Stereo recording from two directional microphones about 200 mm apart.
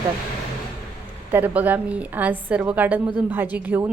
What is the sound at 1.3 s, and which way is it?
Speech, 10° right (ahead or behind).